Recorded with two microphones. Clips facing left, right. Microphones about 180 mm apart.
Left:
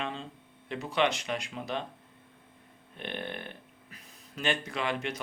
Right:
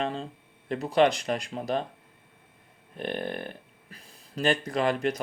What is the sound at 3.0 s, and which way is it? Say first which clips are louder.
Speech: right 6 dB; 40° right (ahead or behind).